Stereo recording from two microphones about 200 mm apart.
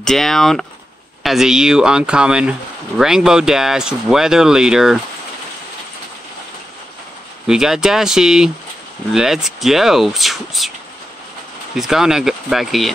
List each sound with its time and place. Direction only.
0.0 s speech: centre (ahead or behind)
7.4 s speech: centre (ahead or behind)
11.7 s speech: centre (ahead or behind)